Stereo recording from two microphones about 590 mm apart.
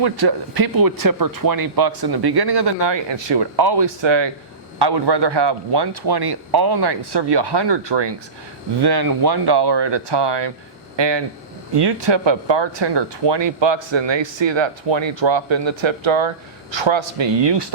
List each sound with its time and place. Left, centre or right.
0.0 s speech: right